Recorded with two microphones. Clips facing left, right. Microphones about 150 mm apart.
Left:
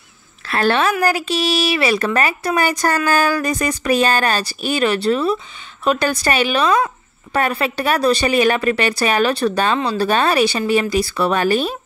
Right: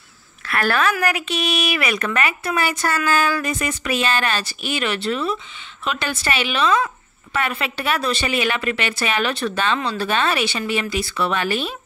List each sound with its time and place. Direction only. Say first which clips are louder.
0.5 s a woman's voice: left 3 dB; 25° left (ahead or behind)